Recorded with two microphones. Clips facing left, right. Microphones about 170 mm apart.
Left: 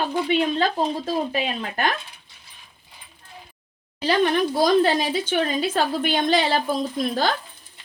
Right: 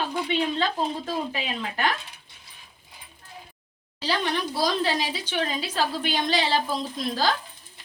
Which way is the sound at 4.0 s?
50° left (ahead or behind).